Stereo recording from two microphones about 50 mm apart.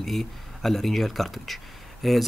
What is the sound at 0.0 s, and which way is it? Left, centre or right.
A man's voice, centre.